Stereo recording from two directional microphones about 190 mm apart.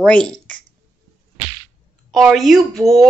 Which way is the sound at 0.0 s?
5° left (ahead or behind).